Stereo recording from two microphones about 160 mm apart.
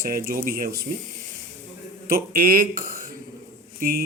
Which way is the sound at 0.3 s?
65° right (ahead or behind).